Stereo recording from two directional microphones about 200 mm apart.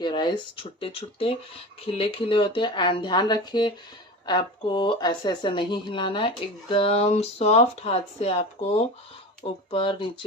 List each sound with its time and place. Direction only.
0.0 s speech: 25° left (ahead or behind)